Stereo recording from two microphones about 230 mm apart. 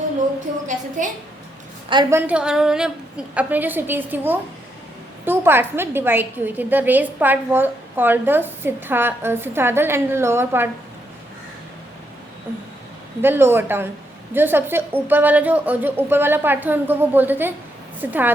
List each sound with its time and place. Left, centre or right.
1.0 s a woman's voice: right
1.9 s a woman's voice: centre
13.2 s a woman's voice: centre